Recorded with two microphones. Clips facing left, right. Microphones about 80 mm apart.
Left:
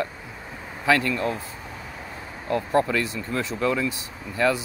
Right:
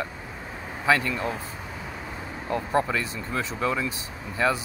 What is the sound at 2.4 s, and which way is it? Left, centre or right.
Speech, centre.